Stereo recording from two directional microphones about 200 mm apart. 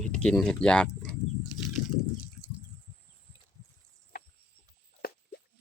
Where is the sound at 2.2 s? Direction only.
5° right (ahead or behind).